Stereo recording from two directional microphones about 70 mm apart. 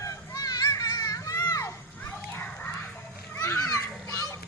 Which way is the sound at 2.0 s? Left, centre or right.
Left.